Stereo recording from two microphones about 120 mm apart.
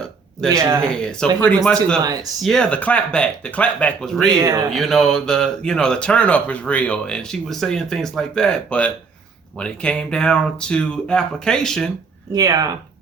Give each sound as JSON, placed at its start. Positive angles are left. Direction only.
{"t": 0.5, "sound": "speech", "side_deg": -25}
{"t": 0.8, "sound": "speech", "side_deg": 5}
{"t": 4.4, "sound": "speech", "side_deg": -25}
{"t": 4.7, "sound": "speech", "side_deg": 5}
{"t": 12.3, "sound": "speech", "side_deg": -30}